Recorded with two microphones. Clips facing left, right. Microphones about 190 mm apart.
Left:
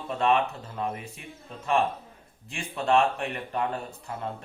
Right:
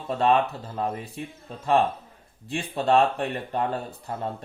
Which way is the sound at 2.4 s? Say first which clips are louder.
Right 3 dB; 35° right (ahead or behind).